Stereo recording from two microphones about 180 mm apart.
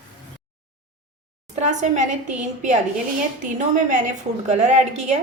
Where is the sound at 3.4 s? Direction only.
45° right (ahead or behind).